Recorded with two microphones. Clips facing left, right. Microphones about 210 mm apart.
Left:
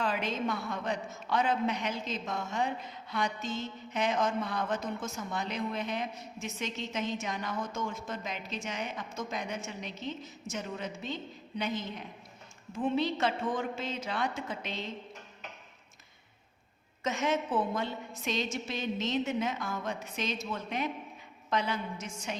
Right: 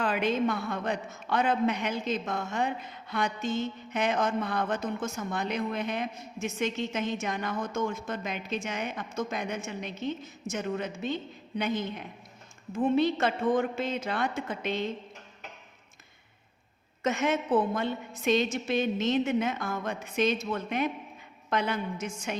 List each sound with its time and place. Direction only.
0.0 s a woman's voice: 60° right (ahead or behind)
13.0 s a woman's voice: 55° right (ahead or behind)
17.0 s a woman's voice: 60° right (ahead or behind)